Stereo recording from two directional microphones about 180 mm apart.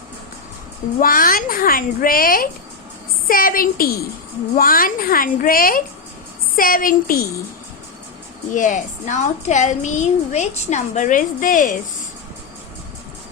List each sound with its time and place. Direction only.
0.9 s a woman's voice: 50° left (ahead or behind)
8.5 s a woman's voice: 45° left (ahead or behind)